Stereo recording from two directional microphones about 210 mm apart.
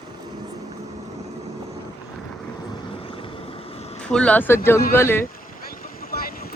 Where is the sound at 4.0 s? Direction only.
5° left (ahead or behind).